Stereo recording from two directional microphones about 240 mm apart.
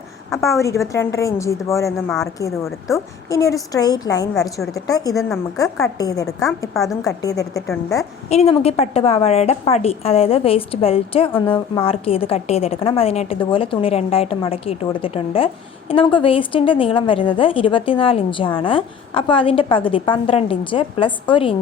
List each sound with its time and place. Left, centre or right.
0.5 s a woman's voice: centre
2.0 s a woman's voice: centre
2.8 s a woman's voice: centre
8.3 s a woman's voice: left